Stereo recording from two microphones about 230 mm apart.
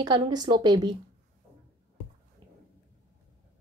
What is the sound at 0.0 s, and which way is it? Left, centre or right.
Speech, centre.